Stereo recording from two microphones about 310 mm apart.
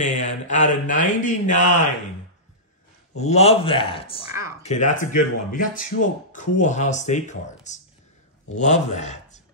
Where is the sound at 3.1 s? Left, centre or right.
Left.